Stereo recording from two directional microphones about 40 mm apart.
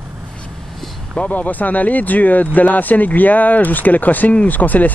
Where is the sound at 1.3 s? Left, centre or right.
Left.